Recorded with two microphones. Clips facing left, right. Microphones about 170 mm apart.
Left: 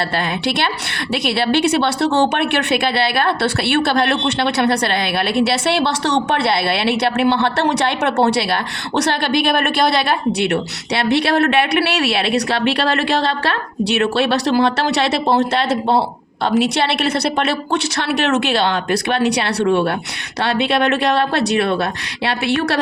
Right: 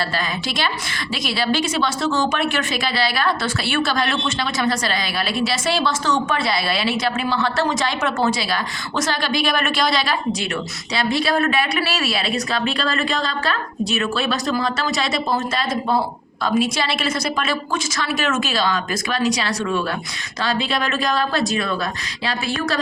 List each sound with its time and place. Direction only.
0.2 s a woman's voice: 65° left (ahead or behind)